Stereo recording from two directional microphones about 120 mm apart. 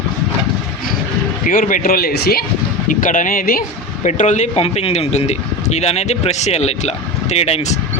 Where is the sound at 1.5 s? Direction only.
90° left.